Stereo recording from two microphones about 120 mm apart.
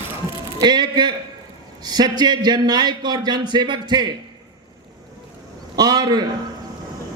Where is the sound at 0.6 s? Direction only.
35° right (ahead or behind).